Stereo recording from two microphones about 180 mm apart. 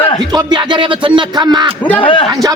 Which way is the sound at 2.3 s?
20° right (ahead or behind).